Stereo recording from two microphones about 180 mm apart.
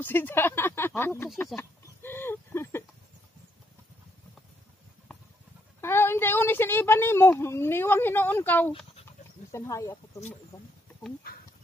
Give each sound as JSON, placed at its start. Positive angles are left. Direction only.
{"t": 0.0, "sound": "a woman's voice", "side_deg": 10}
{"t": 1.6, "sound": "a sound", "side_deg": 10}
{"t": 5.8, "sound": "a woman's voice", "side_deg": 15}